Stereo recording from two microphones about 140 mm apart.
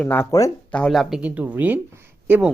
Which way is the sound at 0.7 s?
5° left (ahead or behind).